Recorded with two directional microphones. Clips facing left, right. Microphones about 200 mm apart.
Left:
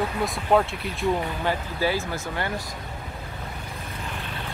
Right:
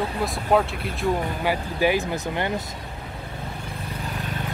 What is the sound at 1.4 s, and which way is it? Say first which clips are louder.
Speech: right 4 dB; 15° right (ahead or behind).